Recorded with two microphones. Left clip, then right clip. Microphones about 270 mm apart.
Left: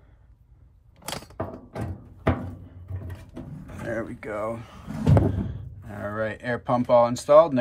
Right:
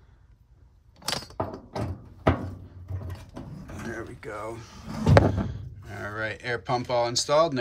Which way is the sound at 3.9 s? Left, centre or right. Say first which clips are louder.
Left 6 dB; left.